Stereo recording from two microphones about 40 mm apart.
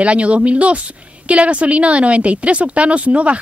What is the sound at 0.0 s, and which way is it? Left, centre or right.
A woman's voice, right.